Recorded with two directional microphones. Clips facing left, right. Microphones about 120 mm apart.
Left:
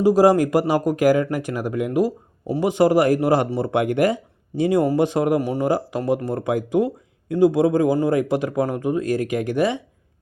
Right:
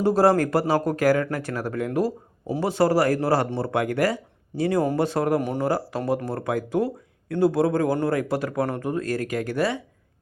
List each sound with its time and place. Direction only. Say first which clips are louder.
0.0 s speech: left 4 dB; 10° left (ahead or behind)
5.4 s speech: left 3 dB; centre (ahead or behind)
5.6 s speech: left 3 dB; 15° left (ahead or behind)